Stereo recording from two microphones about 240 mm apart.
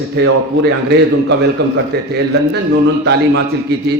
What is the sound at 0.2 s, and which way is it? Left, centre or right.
Speech, right.